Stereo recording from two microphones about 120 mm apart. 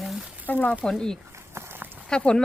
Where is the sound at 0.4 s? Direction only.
15° left (ahead or behind).